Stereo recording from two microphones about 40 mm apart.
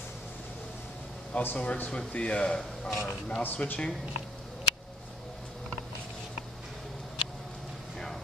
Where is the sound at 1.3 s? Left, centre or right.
Left.